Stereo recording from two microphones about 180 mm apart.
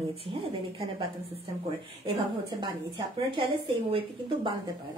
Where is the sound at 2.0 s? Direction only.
25° right (ahead or behind).